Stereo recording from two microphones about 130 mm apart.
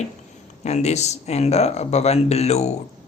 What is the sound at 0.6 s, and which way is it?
Speech, 60° left (ahead or behind).